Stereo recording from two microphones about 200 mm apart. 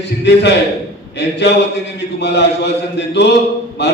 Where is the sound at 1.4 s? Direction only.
60° left (ahead or behind).